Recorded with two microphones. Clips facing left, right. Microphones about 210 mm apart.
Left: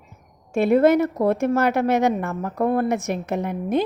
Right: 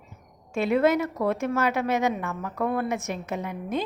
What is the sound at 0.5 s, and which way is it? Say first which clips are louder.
A woman's voice: left 6 dB; 55° left (ahead or behind).